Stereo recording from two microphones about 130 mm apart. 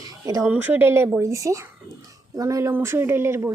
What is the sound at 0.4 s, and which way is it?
A woman's voice, 10° right (ahead or behind).